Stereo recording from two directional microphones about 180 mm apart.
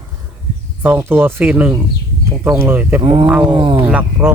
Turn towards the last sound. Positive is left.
turn(degrees=-10)  # may be behind; listen again after turning